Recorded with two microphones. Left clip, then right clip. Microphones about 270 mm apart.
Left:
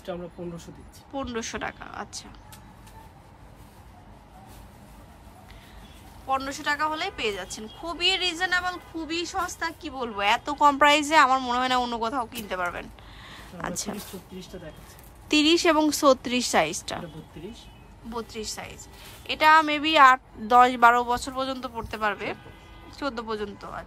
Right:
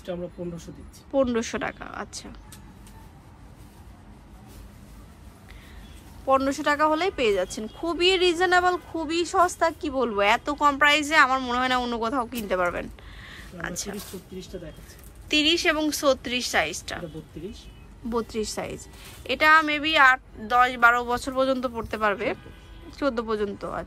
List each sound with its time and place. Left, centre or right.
1.1 s a woman's voice: centre
6.2 s a woman's voice: centre; by 13.9 s left
15.2 s speech: left
18.3 s a woman's voice: centre